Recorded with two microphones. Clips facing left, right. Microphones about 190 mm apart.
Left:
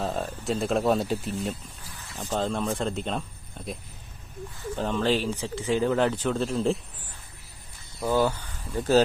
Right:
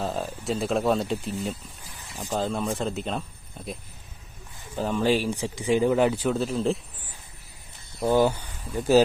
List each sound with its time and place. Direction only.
0.0 s speech: centre (ahead or behind)
4.7 s speech: 10° right (ahead or behind)
8.0 s speech: 15° right (ahead or behind)